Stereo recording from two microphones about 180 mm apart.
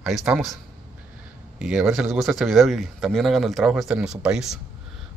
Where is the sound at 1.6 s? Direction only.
5° right (ahead or behind).